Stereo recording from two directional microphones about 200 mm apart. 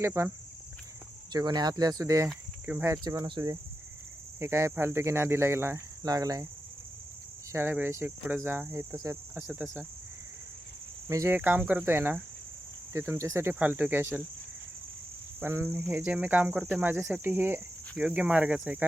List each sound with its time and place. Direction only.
0.0 s speech: 15° right (ahead or behind)
1.3 s speech: 20° right (ahead or behind)
7.5 s speech: 10° right (ahead or behind)
11.1 s speech: 15° right (ahead or behind)
15.4 s speech: 10° right (ahead or behind)